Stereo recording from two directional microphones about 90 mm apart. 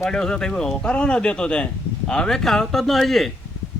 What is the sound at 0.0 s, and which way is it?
Speech, 5° left (ahead or behind).